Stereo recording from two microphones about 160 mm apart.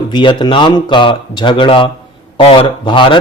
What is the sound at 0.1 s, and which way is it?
A man's voice, 30° left (ahead or behind).